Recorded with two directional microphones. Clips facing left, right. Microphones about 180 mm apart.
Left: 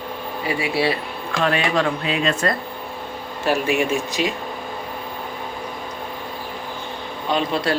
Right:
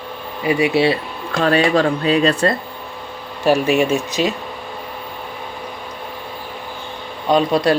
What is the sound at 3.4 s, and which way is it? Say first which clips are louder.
Speech: right 5 dB; 15° right (ahead or behind).